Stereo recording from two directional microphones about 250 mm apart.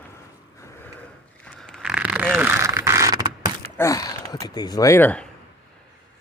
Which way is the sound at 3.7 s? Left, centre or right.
Centre.